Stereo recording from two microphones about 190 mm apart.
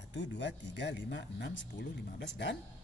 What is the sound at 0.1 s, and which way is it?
Speech, 65° left (ahead or behind).